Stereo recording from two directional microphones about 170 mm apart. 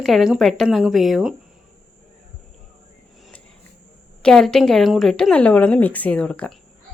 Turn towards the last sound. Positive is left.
turn(degrees=5)  # may be behind; listen again after turning